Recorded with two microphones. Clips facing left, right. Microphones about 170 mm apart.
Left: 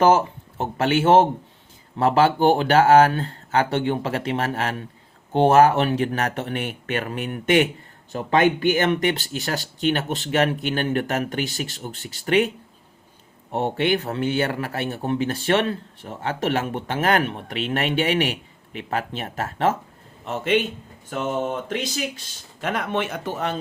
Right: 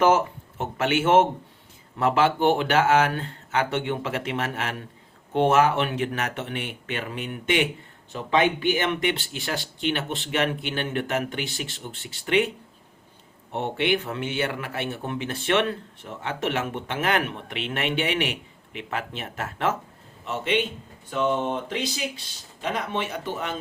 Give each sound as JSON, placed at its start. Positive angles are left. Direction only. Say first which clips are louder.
{"t": 0.6, "sound": "speech", "louder": "left 3 dB", "side_deg": 35}
{"t": 13.5, "sound": "speech", "louder": "left 3 dB", "side_deg": 40}
{"t": 21.1, "sound": "a sound", "louder": "right 1 dB", "side_deg": 45}
{"t": 22.6, "sound": "speech", "louder": "left 3 dB", "side_deg": 55}